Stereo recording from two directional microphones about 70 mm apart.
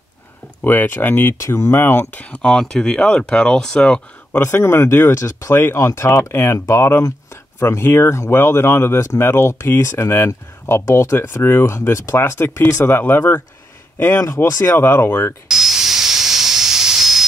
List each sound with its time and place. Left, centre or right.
0.7 s speech: left
1.4 s speech: left
2.4 s speech: centre
4.4 s a man's voice: left
14.2 s speech: left
15.5 s steam: centre